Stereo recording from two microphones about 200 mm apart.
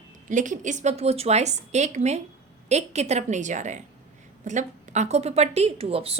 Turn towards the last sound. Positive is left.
turn(degrees=-30)  # may be behind; listen again after turning